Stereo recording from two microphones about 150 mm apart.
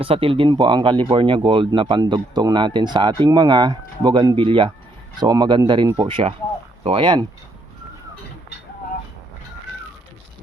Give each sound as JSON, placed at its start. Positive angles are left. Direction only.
{"t": 0.0, "sound": "speech", "side_deg": -35}